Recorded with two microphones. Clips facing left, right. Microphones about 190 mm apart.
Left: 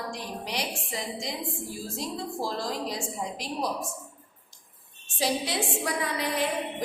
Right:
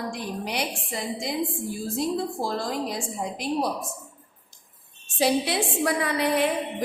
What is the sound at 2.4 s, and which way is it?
A woman's voice, 55° right (ahead or behind).